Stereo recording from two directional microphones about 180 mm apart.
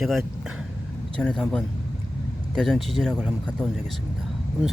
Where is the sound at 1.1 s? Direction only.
5° left (ahead or behind).